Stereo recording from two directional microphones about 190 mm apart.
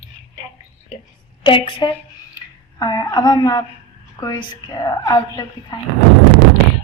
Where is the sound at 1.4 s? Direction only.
25° left (ahead or behind).